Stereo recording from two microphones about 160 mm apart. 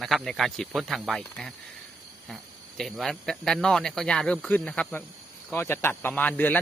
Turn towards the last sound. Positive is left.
turn(degrees=10)  # may be behind; listen again after turning